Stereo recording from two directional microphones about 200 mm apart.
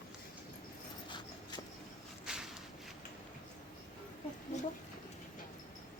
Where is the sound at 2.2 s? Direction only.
Centre (ahead or behind).